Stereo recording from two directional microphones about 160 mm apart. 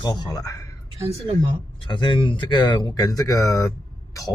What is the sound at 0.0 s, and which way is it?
Speech, 25° left (ahead or behind).